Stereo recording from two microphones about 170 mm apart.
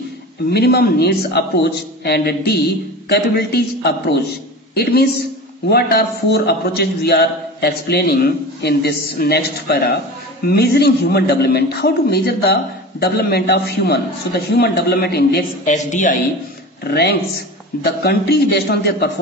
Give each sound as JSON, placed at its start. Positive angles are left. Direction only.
{"t": 0.5, "sound": "a man's voice", "side_deg": 75}
{"t": 15.6, "sound": "speech", "side_deg": 45}
{"t": 16.8, "sound": "a man's voice", "side_deg": 70}